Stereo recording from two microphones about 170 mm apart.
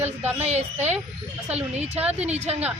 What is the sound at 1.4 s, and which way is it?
Speech, 10° right (ahead or behind).